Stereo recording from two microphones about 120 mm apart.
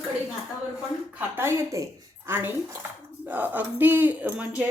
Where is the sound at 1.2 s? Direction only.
20° right (ahead or behind).